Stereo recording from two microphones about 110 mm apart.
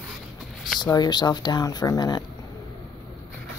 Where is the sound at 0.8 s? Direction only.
40° left (ahead or behind).